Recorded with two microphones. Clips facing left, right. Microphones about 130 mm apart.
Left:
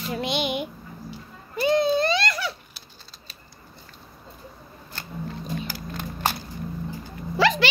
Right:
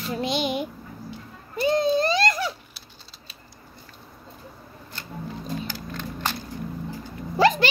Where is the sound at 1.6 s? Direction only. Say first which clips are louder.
Even; 40° right (ahead or behind).